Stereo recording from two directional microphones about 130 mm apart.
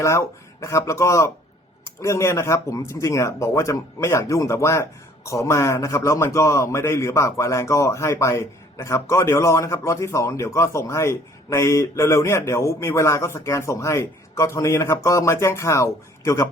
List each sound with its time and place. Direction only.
0.0 s speech: 20° left (ahead or behind)